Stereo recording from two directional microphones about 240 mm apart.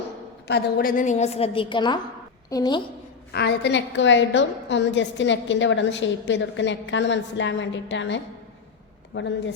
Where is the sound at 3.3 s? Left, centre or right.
Left.